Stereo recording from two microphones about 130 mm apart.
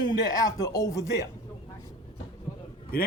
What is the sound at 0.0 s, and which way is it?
Speech, 30° left (ahead or behind).